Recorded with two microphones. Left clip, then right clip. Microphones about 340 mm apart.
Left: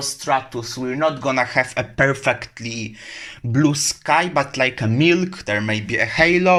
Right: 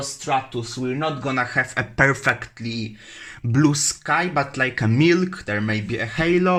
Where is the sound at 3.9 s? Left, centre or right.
Centre.